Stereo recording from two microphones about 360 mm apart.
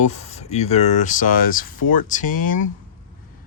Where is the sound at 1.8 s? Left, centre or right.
Left.